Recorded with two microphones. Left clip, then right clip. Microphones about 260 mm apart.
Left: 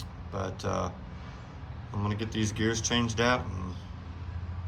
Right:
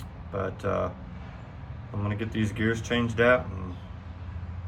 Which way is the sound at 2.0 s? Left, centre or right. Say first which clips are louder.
Right 1 dB; centre.